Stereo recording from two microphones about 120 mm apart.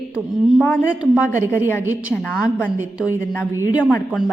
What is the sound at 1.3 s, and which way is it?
Speech, 20° left (ahead or behind).